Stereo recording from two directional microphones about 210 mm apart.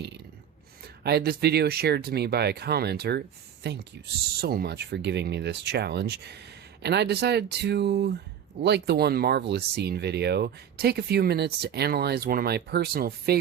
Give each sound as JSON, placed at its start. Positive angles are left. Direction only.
{"t": 1.0, "sound": "speech", "side_deg": -50}